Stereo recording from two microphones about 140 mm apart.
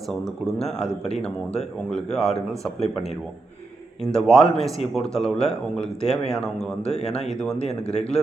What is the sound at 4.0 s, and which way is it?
Speech, centre (ahead or behind).